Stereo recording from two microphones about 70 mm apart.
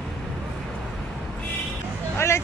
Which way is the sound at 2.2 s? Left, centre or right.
Left.